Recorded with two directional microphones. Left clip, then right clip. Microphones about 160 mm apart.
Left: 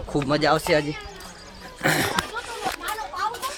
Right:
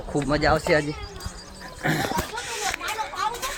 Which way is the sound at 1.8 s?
60° left (ahead or behind).